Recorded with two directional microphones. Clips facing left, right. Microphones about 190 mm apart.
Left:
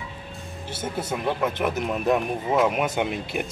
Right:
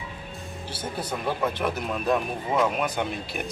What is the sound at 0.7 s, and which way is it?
Speech, 20° left (ahead or behind).